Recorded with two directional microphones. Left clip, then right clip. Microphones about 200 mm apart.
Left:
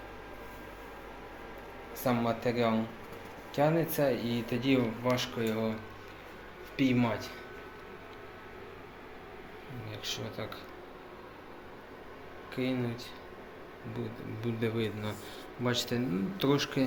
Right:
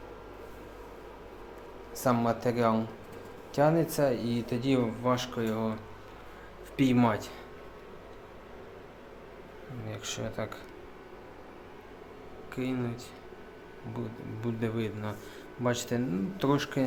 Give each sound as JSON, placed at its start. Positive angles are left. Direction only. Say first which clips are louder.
{"t": 2.0, "sound": "speech", "louder": "right 3 dB", "side_deg": -20}
{"t": 6.7, "sound": "speech", "louder": "right 3 dB", "side_deg": -25}
{"t": 9.9, "sound": "speech", "louder": "right 1 dB", "side_deg": -30}
{"t": 12.5, "sound": "speech", "louder": "left 1 dB", "side_deg": -15}
{"t": 14.4, "sound": "speech", "louder": "even", "side_deg": -15}